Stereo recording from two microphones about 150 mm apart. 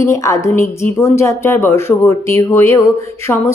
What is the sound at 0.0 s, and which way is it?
A woman's voice, 20° left (ahead or behind).